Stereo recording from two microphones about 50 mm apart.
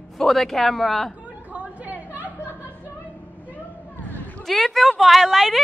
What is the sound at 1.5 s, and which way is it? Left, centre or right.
Chatter, right.